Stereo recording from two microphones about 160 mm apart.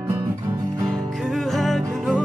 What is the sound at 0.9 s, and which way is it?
Music, centre (ahead or behind).